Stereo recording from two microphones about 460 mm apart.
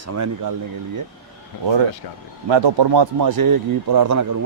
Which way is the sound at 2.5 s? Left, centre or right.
Right.